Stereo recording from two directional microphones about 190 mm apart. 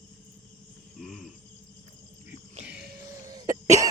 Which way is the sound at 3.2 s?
20° right (ahead or behind).